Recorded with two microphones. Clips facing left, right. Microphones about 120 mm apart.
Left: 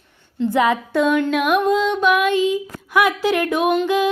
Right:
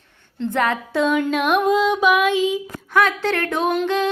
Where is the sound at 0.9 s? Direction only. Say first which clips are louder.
Even; centre (ahead or behind).